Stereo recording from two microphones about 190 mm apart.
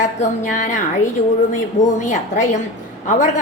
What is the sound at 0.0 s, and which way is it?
A woman's voice, 40° left (ahead or behind).